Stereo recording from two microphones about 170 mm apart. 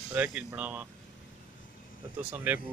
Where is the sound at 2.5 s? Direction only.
10° right (ahead or behind).